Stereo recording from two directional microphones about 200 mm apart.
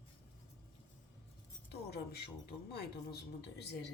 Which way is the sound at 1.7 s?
55° left (ahead or behind).